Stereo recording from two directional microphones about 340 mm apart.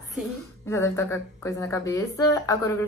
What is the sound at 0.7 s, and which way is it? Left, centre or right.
Speech, centre.